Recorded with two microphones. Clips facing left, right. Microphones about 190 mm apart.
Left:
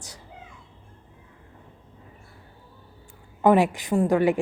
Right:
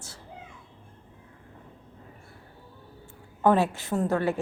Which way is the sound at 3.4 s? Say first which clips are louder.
Left 4 dB; 15° left (ahead or behind).